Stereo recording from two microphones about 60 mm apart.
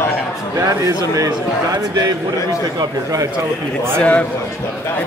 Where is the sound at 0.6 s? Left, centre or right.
Right.